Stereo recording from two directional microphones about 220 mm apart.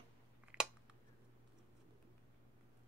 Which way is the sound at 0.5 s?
5° right (ahead or behind).